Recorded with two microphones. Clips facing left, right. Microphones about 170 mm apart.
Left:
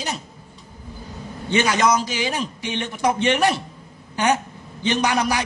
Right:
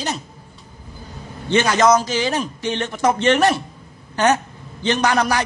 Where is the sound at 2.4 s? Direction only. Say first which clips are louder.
Right 3 dB; 45° right (ahead or behind).